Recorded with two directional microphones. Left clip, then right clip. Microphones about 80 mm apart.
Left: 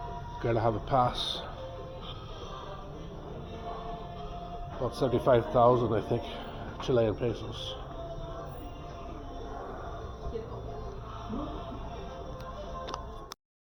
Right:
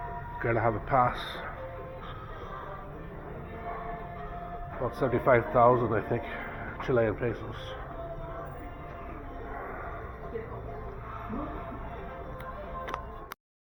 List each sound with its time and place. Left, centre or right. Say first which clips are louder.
0.3 s a man's voice: right 1 dB; left
4.8 s a man's voice: even; left
6.3 s a sound: right 3 dB; left
7.3 s speech: even; left
11.3 s music: even; left